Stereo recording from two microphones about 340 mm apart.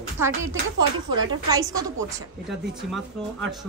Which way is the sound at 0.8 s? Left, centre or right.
Centre.